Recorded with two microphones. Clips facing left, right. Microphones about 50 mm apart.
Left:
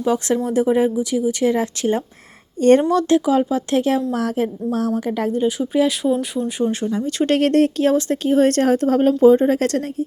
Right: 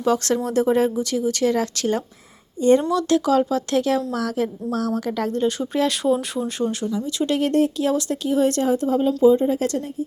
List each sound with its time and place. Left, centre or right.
0.0 s a woman's voice: centre
2.6 s speech: left
3.1 s a woman's voice: centre
5.4 s speech: centre
6.1 s speech: centre
6.6 s a woman's voice: left
6.9 s speech: left
7.3 s speech: left
7.9 s speech: left